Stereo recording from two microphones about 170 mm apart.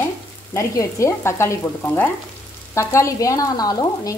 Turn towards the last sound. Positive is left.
turn(degrees=20)  # may be behind; listen again after turning